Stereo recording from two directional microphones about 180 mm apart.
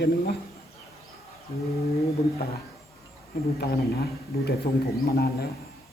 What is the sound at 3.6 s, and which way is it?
Speech, 60° left (ahead or behind).